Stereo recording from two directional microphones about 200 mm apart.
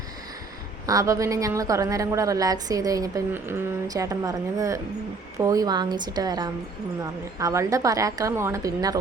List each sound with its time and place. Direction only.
0.9 s a woman's voice: 15° right (ahead or behind)